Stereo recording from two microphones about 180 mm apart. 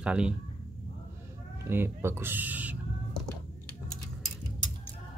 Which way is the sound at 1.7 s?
15° right (ahead or behind).